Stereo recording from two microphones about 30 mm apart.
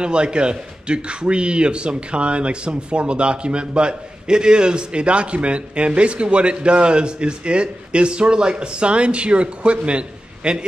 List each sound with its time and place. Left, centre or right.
0.0 s a man's voice: right